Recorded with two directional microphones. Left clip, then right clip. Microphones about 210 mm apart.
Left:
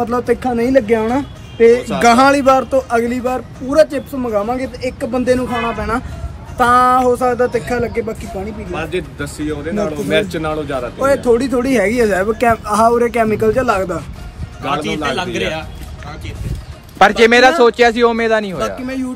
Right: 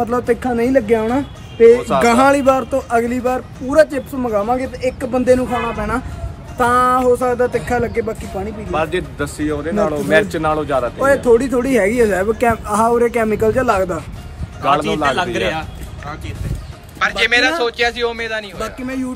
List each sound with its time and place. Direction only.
0.0 s a man's voice: centre (ahead or behind)
5.5 s a man's voice: 10° left (ahead or behind)
8.7 s a man's voice: 25° right (ahead or behind)
11.0 s a man's voice: 5° right (ahead or behind)
14.6 s a man's voice: 15° right (ahead or behind)
17.0 s a man's voice: 10° left (ahead or behind)